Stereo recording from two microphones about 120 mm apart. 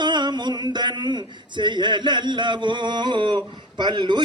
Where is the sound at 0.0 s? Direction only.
40° right (ahead or behind).